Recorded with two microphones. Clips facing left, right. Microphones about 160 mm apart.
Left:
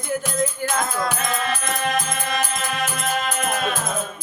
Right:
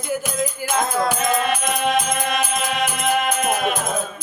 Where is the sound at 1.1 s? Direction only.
20° right (ahead or behind).